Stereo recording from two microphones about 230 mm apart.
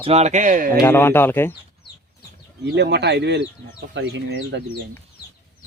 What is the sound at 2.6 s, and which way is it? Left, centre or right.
Speech, right.